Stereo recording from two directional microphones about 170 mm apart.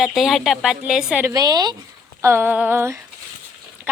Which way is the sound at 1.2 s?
20° right (ahead or behind).